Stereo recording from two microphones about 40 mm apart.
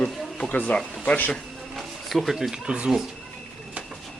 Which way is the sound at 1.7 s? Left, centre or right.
Centre.